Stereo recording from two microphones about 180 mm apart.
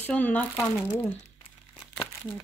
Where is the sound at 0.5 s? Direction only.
20° left (ahead or behind).